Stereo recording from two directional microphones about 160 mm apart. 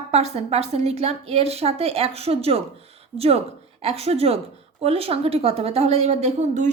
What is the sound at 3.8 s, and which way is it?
A woman's voice, 40° right (ahead or behind).